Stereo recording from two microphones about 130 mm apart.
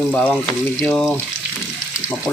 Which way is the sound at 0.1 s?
10° left (ahead or behind).